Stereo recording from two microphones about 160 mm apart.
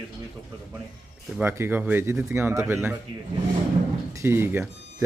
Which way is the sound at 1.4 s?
15° right (ahead or behind).